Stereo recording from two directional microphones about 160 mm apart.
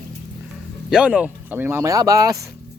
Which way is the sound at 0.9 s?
5° right (ahead or behind).